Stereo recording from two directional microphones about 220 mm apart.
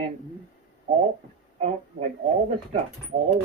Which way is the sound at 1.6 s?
30° right (ahead or behind).